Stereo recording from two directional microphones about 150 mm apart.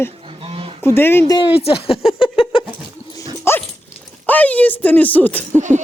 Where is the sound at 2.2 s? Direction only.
35° left (ahead or behind).